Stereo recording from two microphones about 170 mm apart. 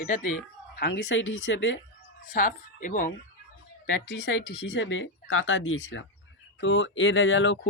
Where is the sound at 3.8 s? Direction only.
80° left.